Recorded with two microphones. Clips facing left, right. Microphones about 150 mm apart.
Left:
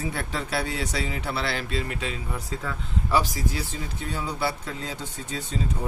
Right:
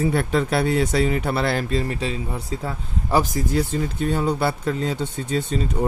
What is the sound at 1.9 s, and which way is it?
Speech, 35° right (ahead or behind).